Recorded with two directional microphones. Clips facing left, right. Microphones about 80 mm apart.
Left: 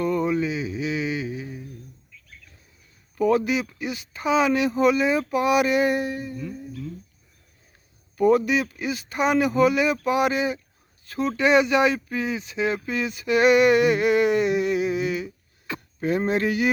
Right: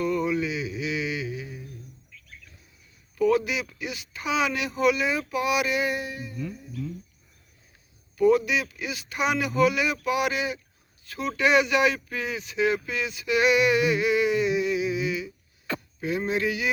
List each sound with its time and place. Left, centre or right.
0.0 s mantra: left
3.2 s speech: left
8.1 s speech: left
16.0 s a sound: left